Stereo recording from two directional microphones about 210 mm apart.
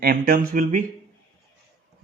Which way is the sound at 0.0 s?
45° right (ahead or behind).